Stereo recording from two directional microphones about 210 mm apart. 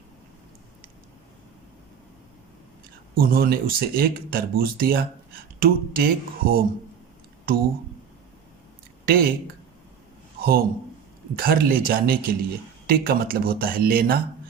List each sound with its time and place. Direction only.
3.2 s speech: 45° right (ahead or behind)
9.0 s speech: 45° right (ahead or behind)
10.4 s a man's voice: 45° right (ahead or behind)